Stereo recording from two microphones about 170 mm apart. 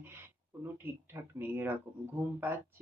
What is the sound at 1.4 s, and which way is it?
Speech, 10° right (ahead or behind).